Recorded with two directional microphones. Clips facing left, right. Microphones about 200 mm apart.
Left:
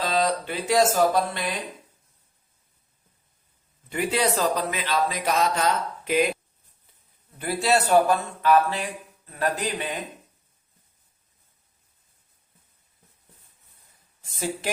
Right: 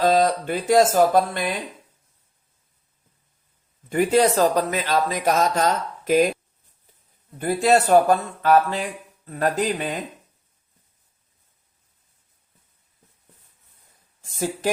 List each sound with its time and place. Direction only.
0.0 s a man's voice: 50° right (ahead or behind)
3.8 s a man's voice: 45° right (ahead or behind)
7.3 s a man's voice: 45° right (ahead or behind)
14.2 s speech: 45° right (ahead or behind)